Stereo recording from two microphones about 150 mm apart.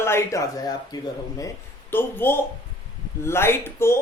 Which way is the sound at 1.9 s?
15° left (ahead or behind).